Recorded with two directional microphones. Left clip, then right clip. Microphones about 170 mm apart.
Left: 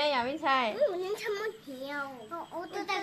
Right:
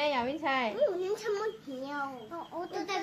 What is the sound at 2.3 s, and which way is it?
Speech, 20° left (ahead or behind).